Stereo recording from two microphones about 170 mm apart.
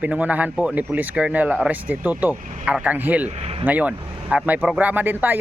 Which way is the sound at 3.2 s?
35° right (ahead or behind).